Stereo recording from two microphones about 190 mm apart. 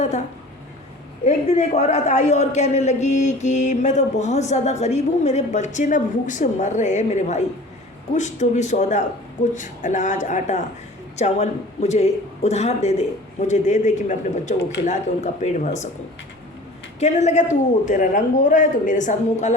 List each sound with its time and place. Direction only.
1.2 s a man's voice: 35° left (ahead or behind)
17.0 s a man's voice: 35° left (ahead or behind)